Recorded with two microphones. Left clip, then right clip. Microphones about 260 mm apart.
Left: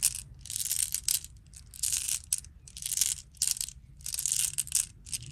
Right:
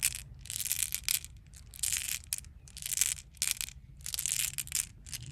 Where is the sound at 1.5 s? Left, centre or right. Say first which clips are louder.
Left 2 dB; centre.